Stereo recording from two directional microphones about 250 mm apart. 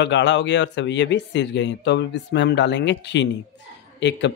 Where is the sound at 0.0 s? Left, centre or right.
Left.